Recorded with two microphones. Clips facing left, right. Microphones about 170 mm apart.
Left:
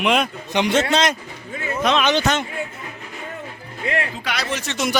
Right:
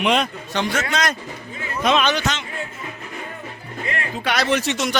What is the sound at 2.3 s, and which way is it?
Speech, 55° left (ahead or behind).